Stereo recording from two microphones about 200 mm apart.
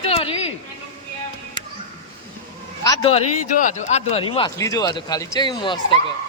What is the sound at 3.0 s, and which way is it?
Speech, 35° left (ahead or behind).